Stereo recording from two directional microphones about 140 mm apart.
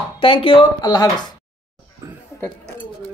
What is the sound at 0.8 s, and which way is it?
Speech, 30° left (ahead or behind).